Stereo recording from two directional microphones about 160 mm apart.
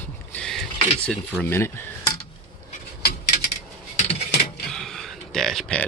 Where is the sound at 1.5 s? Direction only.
15° left (ahead or behind).